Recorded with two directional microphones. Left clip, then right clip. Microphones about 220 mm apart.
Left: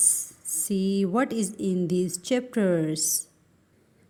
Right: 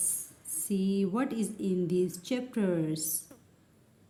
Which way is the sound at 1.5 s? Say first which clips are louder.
Left 2 dB; 35° left (ahead or behind).